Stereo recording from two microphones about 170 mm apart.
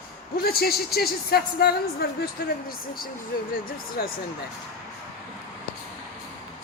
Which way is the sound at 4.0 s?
60° left (ahead or behind).